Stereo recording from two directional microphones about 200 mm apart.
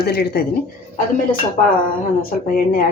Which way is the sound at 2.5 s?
45° left (ahead or behind).